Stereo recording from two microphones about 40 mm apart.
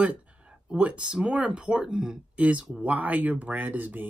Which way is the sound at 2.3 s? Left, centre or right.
Right.